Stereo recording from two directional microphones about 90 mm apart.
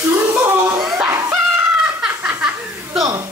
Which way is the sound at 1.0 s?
30° right (ahead or behind).